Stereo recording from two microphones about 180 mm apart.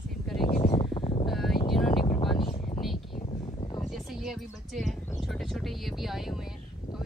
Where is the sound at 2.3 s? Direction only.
30° left (ahead or behind).